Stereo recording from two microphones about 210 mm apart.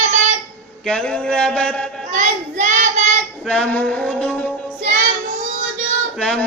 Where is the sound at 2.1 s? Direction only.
35° right (ahead or behind).